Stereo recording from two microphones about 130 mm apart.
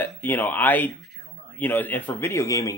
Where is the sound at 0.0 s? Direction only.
15° left (ahead or behind).